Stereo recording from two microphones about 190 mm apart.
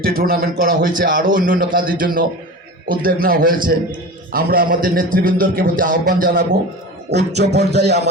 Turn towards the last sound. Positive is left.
turn(degrees=-60)  # may be behind; listen again after turning